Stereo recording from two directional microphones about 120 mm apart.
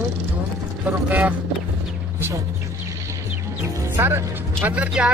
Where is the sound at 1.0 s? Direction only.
10° right (ahead or behind).